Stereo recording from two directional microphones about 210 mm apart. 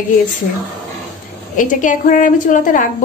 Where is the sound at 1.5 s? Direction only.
40° left (ahead or behind).